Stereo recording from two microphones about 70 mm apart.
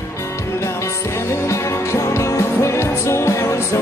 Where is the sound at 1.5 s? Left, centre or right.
Left.